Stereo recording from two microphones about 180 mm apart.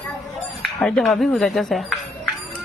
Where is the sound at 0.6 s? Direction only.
Centre (ahead or behind).